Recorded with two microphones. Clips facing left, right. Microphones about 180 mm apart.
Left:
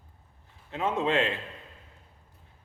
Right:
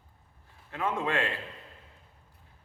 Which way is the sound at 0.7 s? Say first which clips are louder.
Left 3 dB; 20° left (ahead or behind).